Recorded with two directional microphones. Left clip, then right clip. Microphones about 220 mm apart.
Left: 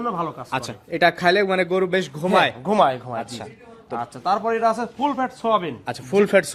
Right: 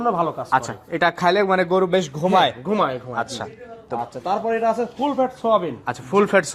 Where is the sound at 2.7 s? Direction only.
45° left (ahead or behind).